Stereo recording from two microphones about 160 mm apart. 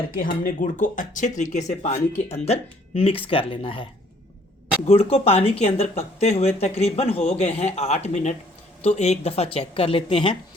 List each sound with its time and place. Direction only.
0.1 s speech: 60° left (ahead or behind); by 3.8 s 35° left (ahead or behind)
4.9 s speech: 40° left (ahead or behind)